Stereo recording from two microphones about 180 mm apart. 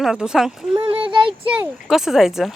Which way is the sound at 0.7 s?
30° right (ahead or behind).